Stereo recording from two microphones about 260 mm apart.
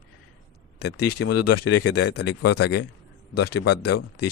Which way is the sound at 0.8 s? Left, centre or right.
Left.